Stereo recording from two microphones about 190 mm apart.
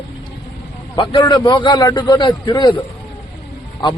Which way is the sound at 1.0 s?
25° left (ahead or behind).